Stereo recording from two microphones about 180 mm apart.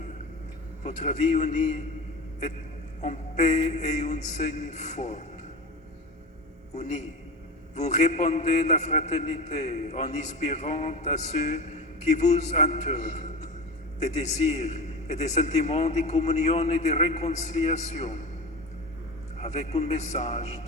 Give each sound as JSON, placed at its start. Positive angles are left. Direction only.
{"t": 0.9, "sound": "a man's voice", "side_deg": 40}
{"t": 3.0, "sound": "a man's voice", "side_deg": 40}
{"t": 6.7, "sound": "a man's voice", "side_deg": 40}
{"t": 19.4, "sound": "a man's voice", "side_deg": 40}